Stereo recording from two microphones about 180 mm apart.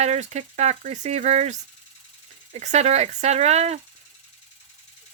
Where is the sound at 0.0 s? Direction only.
40° right (ahead or behind).